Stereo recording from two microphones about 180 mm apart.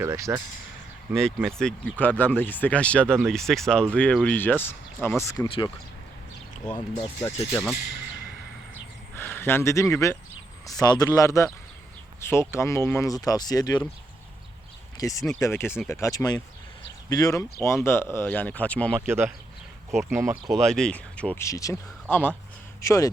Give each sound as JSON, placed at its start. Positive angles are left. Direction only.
{"t": 0.0, "sound": "speech", "side_deg": -15}
{"t": 1.1, "sound": "speech", "side_deg": 5}
{"t": 5.5, "sound": "speech", "side_deg": 30}
{"t": 9.1, "sound": "speech", "side_deg": 10}
{"t": 14.9, "sound": "speech", "side_deg": 20}
{"t": 18.9, "sound": "speech", "side_deg": -15}
{"t": 19.9, "sound": "speech", "side_deg": 0}
{"t": 20.1, "sound": "speech", "side_deg": -15}
{"t": 20.5, "sound": "speech", "side_deg": 0}